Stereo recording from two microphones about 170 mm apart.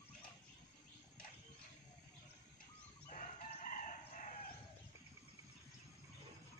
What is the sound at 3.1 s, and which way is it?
Chicken, 45° left (ahead or behind).